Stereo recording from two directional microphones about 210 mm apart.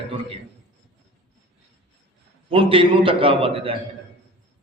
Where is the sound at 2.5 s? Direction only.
25° right (ahead or behind).